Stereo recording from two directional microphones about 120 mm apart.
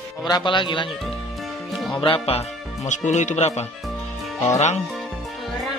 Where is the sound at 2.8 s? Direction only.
90° left; by 4.8 s 70° left (ahead or behind).